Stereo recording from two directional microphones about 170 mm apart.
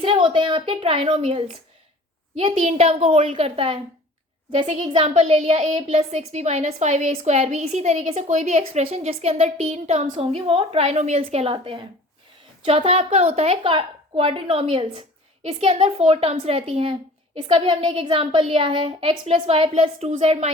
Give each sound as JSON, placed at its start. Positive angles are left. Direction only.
{"t": 0.0, "sound": "a woman's voice", "side_deg": -30}